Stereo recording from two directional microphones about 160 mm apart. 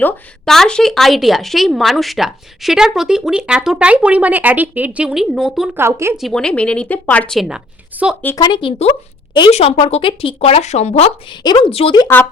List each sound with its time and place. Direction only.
0.0 s speech: 5° left (ahead or behind)
5.7 s speech: 15° right (ahead or behind)
6.1 s speech: centre (ahead or behind)
8.4 s speech: 25° left (ahead or behind)
11.3 s speech: 30° left (ahead or behind)
12.0 s speech: 10° left (ahead or behind)